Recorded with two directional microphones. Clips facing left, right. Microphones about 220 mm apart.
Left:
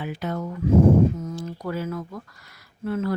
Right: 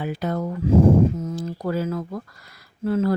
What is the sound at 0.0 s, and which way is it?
Speech, 40° right (ahead or behind).